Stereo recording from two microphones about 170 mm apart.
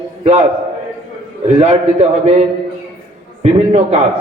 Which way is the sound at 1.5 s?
35° right (ahead or behind).